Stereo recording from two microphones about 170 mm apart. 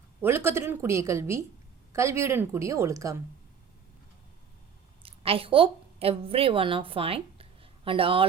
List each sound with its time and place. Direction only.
0.2 s a woman's voice: 15° right (ahead or behind)
5.0 s a woman's voice: 35° right (ahead or behind)